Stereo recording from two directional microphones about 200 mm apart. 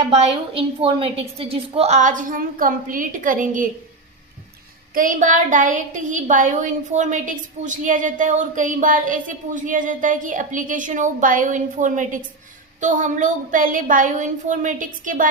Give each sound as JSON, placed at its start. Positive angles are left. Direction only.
{"t": 0.1, "sound": "a woman's voice", "side_deg": -30}
{"t": 4.9, "sound": "a woman's voice", "side_deg": -40}